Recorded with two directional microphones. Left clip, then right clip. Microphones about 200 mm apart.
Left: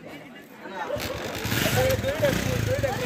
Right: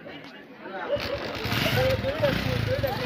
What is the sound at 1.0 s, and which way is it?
Speech, 45° left (ahead or behind).